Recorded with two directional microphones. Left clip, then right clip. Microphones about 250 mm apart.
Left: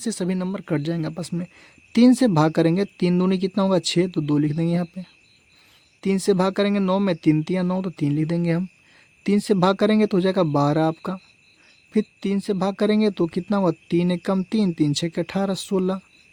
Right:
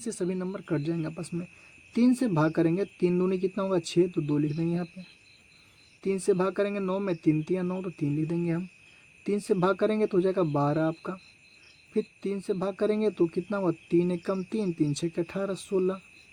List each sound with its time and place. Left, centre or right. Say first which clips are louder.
0.0 s speech: left 5 dB; left
6.0 s speech: left 5 dB; left